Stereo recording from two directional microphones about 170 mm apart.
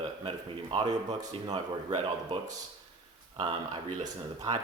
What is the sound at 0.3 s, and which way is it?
Speech, 30° right (ahead or behind).